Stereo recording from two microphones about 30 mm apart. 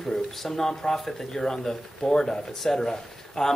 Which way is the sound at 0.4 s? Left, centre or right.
Centre.